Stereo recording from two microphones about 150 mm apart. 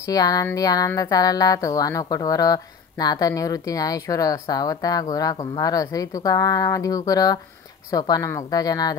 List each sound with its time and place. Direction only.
0.0 s speech: 25° left (ahead or behind)